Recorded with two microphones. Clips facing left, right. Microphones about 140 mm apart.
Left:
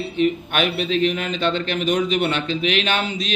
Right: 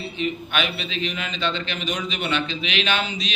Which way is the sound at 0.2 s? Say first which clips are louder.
Left 6 dB; 50° left (ahead or behind).